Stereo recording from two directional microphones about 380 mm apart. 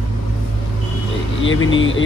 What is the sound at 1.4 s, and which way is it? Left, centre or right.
Speech, left.